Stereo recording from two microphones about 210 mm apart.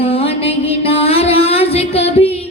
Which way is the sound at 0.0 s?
30° left (ahead or behind).